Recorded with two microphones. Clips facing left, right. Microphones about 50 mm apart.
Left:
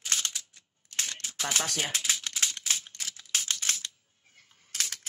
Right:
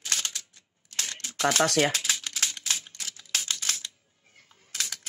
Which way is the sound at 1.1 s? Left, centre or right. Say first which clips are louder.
Right 8 dB; right.